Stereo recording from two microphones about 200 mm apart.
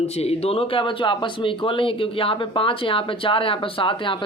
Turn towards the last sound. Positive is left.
turn(degrees=25)  # may be behind; listen again after turning